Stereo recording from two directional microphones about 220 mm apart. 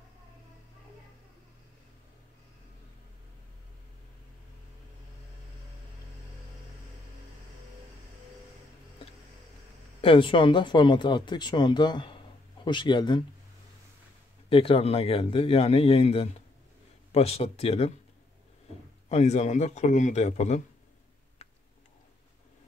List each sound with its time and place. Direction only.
10.0 s speech: 25° left (ahead or behind)
14.5 s speech: 25° left (ahead or behind)
19.0 s a man's voice: 30° left (ahead or behind)